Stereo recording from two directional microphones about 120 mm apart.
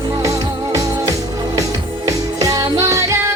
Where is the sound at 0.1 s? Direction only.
25° right (ahead or behind).